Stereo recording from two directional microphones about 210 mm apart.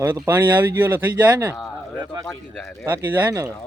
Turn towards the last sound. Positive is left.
turn(degrees=-15)  # may be behind; listen again after turning